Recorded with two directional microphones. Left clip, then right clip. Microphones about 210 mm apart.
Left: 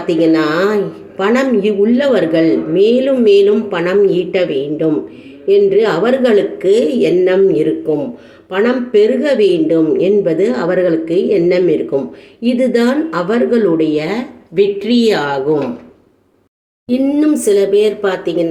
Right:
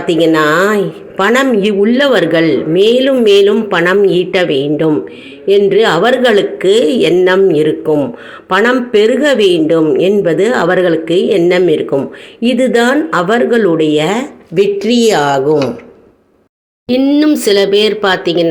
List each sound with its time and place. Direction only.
0.2 s speech: 15° right (ahead or behind)
16.9 s speech: 10° right (ahead or behind)